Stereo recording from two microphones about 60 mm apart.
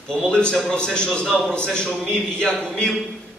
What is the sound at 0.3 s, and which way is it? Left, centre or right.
A man's voice, centre.